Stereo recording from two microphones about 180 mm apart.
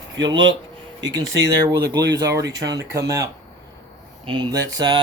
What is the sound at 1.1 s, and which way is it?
Speech, 20° right (ahead or behind).